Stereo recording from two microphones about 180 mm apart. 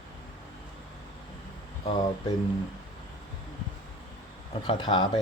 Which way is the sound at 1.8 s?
30° left (ahead or behind).